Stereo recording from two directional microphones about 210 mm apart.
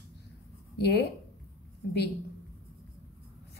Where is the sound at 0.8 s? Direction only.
50° left (ahead or behind).